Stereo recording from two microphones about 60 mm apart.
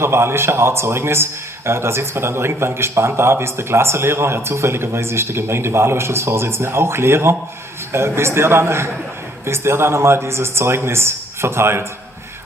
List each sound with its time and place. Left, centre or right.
0.0 s speech: right